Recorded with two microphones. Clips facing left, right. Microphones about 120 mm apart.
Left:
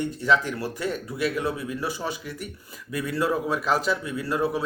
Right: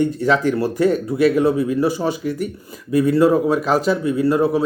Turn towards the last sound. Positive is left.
turn(degrees=-40)  # may be behind; listen again after turning